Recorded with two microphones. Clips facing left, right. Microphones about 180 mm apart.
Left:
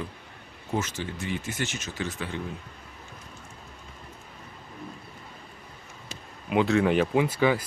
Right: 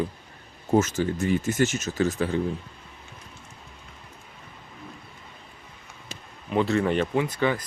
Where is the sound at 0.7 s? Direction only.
45° right (ahead or behind).